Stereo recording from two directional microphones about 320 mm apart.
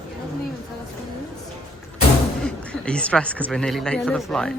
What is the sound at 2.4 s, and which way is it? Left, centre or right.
Speech, centre.